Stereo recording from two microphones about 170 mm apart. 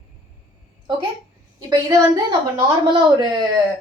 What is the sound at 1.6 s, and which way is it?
Speech, 20° right (ahead or behind).